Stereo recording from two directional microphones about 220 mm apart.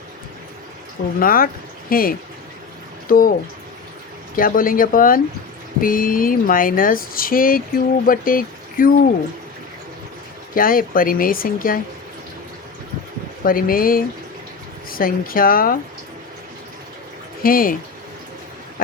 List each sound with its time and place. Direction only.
1.2 s speech: 40° left (ahead or behind)
4.4 s speech: 40° left (ahead or behind)
10.5 s speech: 40° left (ahead or behind)
13.4 s speech: 40° left (ahead or behind)
17.4 s speech: 40° left (ahead or behind)